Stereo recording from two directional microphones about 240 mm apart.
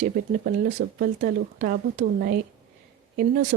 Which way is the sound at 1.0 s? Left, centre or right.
Right.